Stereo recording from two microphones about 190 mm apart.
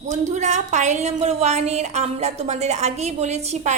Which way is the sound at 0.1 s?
35° right (ahead or behind).